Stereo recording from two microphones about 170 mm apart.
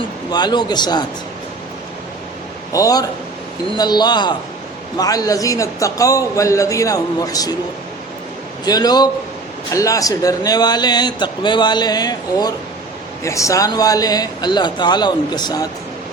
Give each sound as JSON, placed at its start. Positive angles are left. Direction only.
{"t": 0.3, "sound": "speech", "side_deg": 25}
{"t": 2.7, "sound": "speech", "side_deg": 20}
{"t": 8.6, "sound": "speech", "side_deg": 25}